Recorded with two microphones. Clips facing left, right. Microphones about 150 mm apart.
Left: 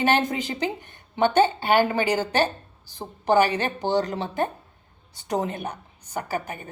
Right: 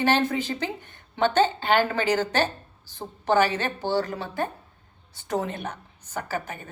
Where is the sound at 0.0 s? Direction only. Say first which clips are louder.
Even; 15° left (ahead or behind).